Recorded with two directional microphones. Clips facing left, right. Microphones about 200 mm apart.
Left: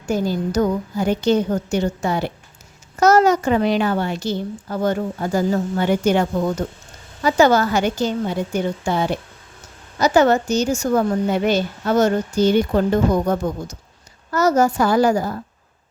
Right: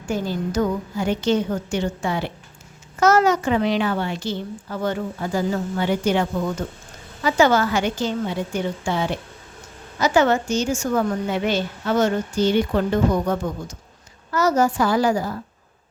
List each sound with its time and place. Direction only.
0.0 s a woman's voice: 40° left (ahead or behind)